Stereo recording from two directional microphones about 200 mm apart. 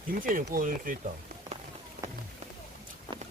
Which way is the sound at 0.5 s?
45° right (ahead or behind).